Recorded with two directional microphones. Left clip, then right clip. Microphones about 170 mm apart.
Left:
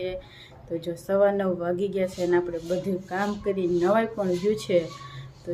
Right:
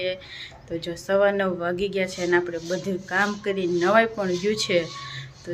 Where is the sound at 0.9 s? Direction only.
5° left (ahead or behind).